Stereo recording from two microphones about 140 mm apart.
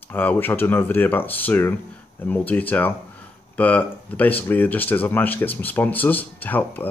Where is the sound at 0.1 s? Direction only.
15° left (ahead or behind).